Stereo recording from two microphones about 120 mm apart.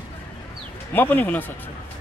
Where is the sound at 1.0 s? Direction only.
15° left (ahead or behind).